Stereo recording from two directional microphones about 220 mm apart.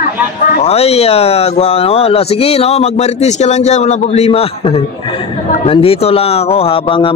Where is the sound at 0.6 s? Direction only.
30° left (ahead or behind).